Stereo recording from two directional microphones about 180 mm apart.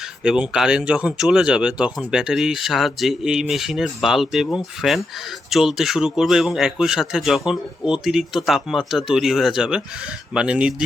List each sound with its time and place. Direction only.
0.2 s speech: 5° right (ahead or behind)